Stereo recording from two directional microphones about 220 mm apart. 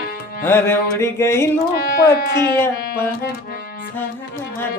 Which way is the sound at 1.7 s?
45° left (ahead or behind).